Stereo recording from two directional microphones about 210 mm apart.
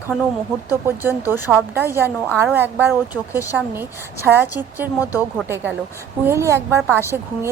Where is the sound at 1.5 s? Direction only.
10° right (ahead or behind).